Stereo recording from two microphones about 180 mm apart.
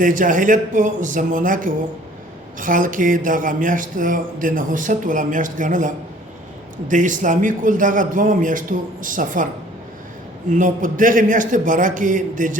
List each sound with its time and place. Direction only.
0.0 s speech: 50° right (ahead or behind)
10.5 s speech: 45° right (ahead or behind)